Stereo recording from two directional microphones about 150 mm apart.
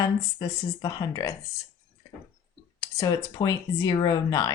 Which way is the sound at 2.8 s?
20° left (ahead or behind).